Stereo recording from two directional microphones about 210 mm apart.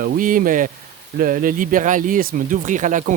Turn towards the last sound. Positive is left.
turn(degrees=-35)  # may be behind; listen again after turning